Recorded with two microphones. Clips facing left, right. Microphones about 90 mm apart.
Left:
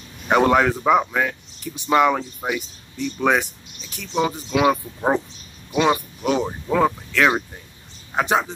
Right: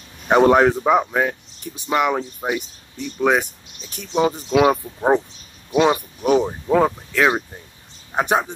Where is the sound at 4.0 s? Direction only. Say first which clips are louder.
Right 3 dB; 20° right (ahead or behind).